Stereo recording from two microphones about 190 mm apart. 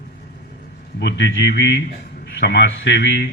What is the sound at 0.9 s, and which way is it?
A man's voice, 65° left (ahead or behind).